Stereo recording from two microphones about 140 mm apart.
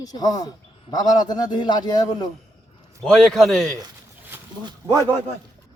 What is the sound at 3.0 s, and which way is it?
Speech, centre (ahead or behind).